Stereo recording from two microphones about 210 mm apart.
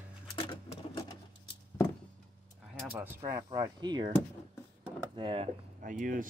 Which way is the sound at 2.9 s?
10° right (ahead or behind).